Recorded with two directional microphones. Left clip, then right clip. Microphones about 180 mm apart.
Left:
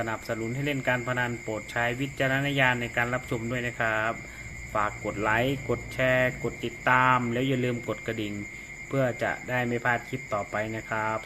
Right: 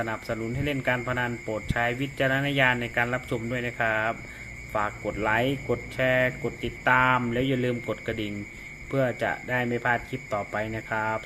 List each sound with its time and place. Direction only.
0.0 s speech: 5° right (ahead or behind)